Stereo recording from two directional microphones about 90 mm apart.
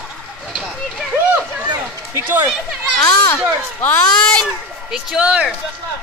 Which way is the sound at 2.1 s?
25° right (ahead or behind).